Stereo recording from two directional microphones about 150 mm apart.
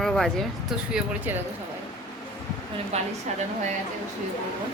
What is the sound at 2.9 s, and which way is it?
Speech, 45° right (ahead or behind).